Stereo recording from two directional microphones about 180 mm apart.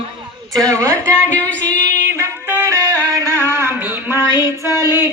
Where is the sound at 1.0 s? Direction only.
5° left (ahead or behind).